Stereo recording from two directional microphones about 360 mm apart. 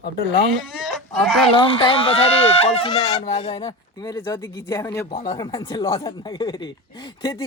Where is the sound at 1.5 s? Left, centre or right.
Centre.